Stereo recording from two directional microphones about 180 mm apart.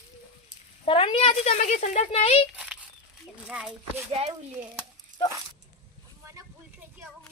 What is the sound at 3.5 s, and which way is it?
Speech, 5° right (ahead or behind).